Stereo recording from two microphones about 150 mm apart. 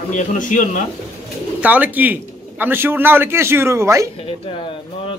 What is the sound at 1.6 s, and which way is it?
A man's voice, 10° right (ahead or behind).